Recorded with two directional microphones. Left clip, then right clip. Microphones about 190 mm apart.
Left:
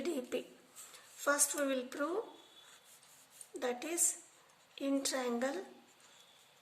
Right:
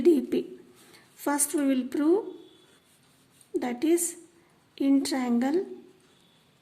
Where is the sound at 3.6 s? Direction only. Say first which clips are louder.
Right 10 dB; 40° right (ahead or behind).